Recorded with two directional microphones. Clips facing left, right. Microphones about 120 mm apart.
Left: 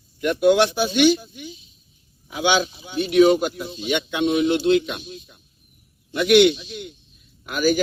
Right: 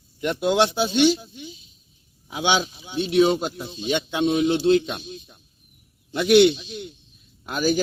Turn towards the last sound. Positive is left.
turn(degrees=-30)  # may be behind; listen again after turning